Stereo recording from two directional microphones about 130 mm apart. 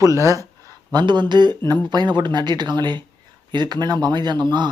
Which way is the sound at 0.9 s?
35° right (ahead or behind).